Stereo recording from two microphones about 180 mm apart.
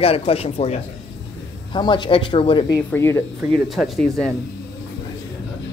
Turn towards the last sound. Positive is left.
turn(degrees=5)  # may be behind; listen again after turning